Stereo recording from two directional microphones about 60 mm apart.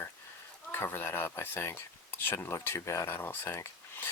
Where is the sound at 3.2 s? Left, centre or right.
Left.